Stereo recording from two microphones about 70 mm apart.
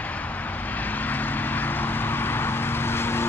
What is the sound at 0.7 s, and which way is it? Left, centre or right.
Vehicle, left.